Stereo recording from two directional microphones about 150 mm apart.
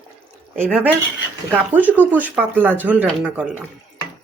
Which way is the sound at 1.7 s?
10° right (ahead or behind).